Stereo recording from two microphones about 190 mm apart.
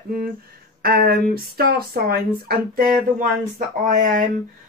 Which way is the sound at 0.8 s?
50° right (ahead or behind).